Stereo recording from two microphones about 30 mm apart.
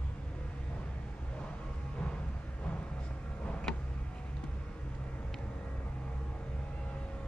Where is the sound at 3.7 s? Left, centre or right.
Centre.